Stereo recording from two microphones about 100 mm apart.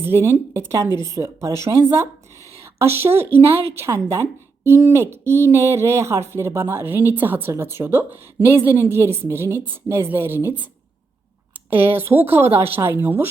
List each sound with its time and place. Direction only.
0.0 s a woman's voice: 25° right (ahead or behind)
2.6 s a woman's voice: 25° right (ahead or behind)
11.7 s a woman's voice: 20° right (ahead or behind)